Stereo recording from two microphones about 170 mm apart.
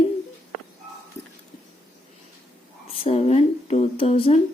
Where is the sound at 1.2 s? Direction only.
40° left (ahead or behind).